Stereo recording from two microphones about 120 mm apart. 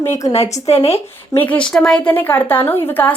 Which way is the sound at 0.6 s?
55° left (ahead or behind).